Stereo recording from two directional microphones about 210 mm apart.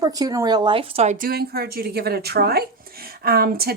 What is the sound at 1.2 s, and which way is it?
Speech, 45° right (ahead or behind).